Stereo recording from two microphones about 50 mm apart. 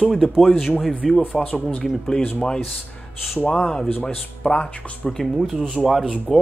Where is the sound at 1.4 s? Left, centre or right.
Left.